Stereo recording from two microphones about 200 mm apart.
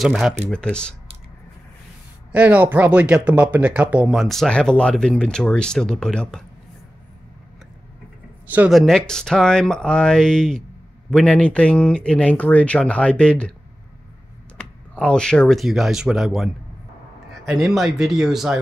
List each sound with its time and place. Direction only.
0.0 s speech: centre (ahead or behind)
2.3 s speech: 5° right (ahead or behind)
8.5 s speech: 5° right (ahead or behind)
14.6 s speech: 5° left (ahead or behind)
17.5 s speech: centre (ahead or behind)